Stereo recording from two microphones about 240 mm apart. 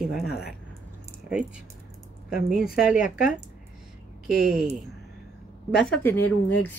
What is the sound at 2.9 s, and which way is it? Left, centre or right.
Speech, left.